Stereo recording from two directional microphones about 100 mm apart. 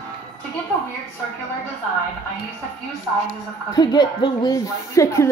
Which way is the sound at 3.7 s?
45° left (ahead or behind).